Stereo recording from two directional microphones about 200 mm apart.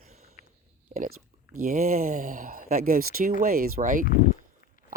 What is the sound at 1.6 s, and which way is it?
Speech, 45° right (ahead or behind).